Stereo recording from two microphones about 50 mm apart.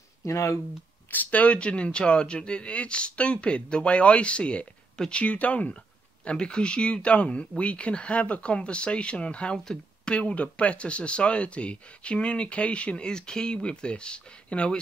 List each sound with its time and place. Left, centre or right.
0.2 s speech: left
1.1 s speech: left